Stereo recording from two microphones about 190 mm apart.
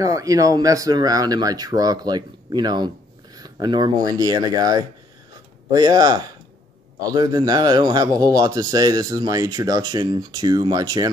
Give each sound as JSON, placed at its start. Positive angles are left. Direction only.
{"t": 0.0, "sound": "a man's voice", "side_deg": -15}